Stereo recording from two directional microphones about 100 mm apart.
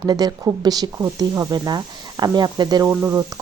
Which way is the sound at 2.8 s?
30° right (ahead or behind).